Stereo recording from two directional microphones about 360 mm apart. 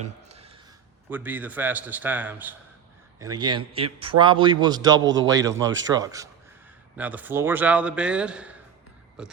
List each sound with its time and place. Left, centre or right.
0.3 s a sound: centre
1.1 s a man's voice: centre
5.0 s a man's voice: right
5.3 s a man's voice: centre